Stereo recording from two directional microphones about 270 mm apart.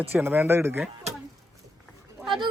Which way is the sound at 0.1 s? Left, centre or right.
Centre.